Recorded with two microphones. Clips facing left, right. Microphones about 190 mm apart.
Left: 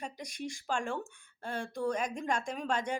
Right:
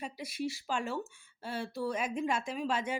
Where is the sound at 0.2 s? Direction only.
5° right (ahead or behind).